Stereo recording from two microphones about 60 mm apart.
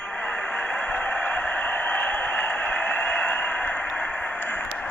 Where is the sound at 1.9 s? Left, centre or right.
Left.